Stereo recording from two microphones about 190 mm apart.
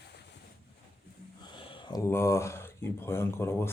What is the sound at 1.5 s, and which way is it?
Speech, 25° left (ahead or behind).